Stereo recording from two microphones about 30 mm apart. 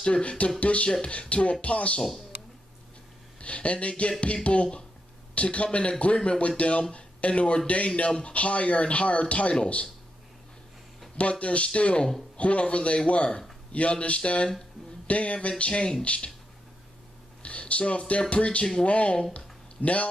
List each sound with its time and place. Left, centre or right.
0.0 s speech: left
3.3 s speech: left
11.1 s speech: left
15.6 s speech: left
16.0 s speech: left
17.4 s a sound: left
18.3 s speech: left
19.3 s a sound: left